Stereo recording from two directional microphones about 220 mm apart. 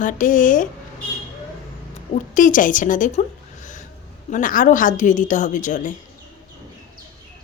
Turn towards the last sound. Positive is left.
turn(degrees=35)  # may be behind; listen again after turning